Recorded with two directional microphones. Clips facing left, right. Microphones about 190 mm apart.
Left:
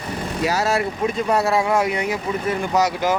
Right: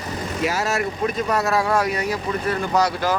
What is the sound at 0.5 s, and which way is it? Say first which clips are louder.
Speech: left 2 dB; 30° left (ahead or behind).